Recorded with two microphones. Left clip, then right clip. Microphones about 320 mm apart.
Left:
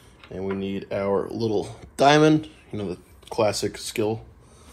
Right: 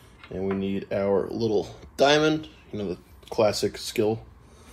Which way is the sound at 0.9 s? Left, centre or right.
Left.